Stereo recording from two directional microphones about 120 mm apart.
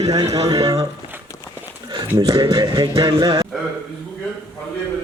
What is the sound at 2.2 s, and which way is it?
Speech, 30° right (ahead or behind).